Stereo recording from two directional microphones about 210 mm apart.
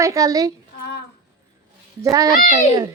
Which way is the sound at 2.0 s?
15° right (ahead or behind).